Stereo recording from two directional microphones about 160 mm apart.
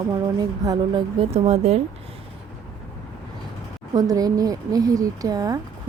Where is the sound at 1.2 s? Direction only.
40° right (ahead or behind).